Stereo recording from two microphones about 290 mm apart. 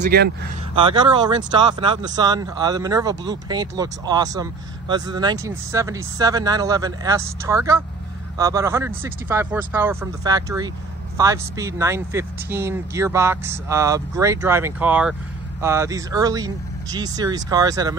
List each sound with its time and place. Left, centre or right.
0.0 s speech: right
0.7 s speech: centre